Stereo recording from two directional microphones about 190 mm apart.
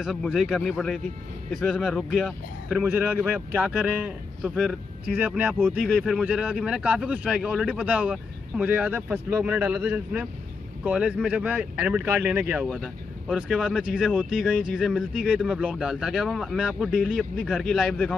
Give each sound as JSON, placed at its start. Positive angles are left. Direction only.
{"t": 0.0, "sound": "speech", "side_deg": 0}